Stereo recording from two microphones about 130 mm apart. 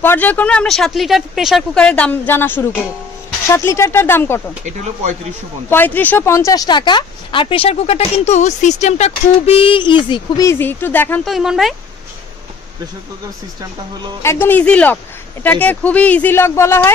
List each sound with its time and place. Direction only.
0.0 s a woman's voice: 15° left (ahead or behind)
5.7 s speech: 15° left (ahead or behind); by 10.4 s 35° left (ahead or behind)
10.4 s a woman's voice: 20° left (ahead or behind)
11.2 s speech: centre (ahead or behind)
14.2 s a woman's voice: 20° left (ahead or behind)